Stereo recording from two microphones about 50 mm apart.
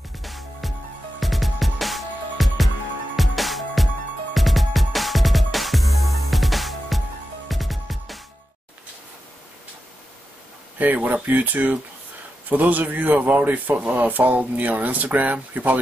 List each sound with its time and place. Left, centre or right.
0.2 s music: centre
10.8 s speech: right